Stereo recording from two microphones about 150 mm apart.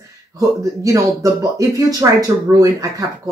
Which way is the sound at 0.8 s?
20° right (ahead or behind).